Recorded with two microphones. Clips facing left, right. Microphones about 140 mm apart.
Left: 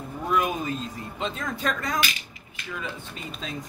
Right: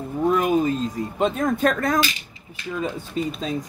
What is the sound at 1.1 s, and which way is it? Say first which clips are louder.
Speech: right 10 dB; 50° right (ahead or behind).